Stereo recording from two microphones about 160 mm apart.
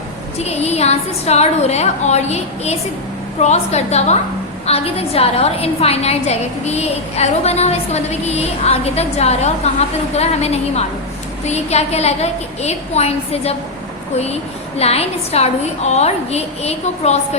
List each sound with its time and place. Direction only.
0.3 s a woman's voice: 40° left (ahead or behind)
14.8 s a woman's voice: 40° left (ahead or behind)